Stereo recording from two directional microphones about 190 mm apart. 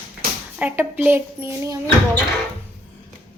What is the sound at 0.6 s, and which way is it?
A woman's voice, 10° right (ahead or behind).